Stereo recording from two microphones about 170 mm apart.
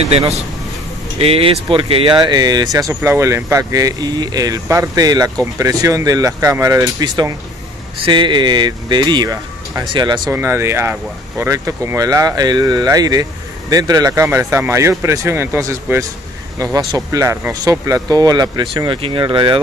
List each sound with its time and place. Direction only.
1.2 s speech: 35° right (ahead or behind)
10.3 s speech: 15° right (ahead or behind)